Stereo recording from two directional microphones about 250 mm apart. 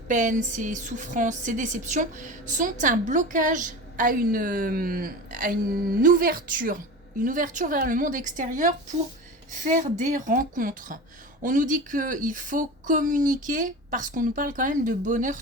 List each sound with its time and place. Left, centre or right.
0.1 s a woman's voice: right